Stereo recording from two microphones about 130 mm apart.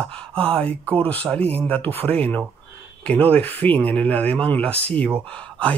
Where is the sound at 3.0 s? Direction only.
10° left (ahead or behind).